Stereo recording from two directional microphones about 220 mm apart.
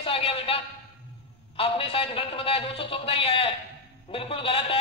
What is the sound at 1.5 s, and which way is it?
A man's voice, 25° left (ahead or behind).